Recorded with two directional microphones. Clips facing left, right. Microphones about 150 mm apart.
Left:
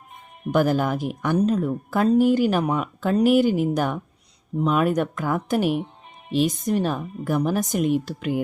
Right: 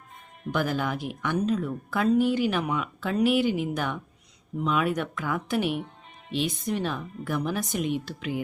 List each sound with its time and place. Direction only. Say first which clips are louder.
0.5 s a woman's voice: left 7 dB; 45° left (ahead or behind)